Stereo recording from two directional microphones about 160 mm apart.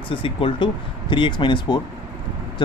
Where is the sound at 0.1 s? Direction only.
35° left (ahead or behind).